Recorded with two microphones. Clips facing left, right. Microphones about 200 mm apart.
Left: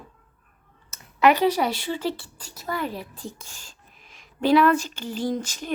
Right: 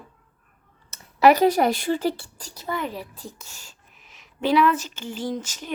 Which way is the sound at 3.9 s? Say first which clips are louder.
Left 2 dB; 45° left (ahead or behind).